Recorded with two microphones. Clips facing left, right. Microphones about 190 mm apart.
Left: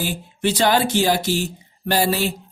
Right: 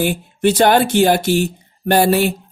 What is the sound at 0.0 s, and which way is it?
Speech, 55° right (ahead or behind).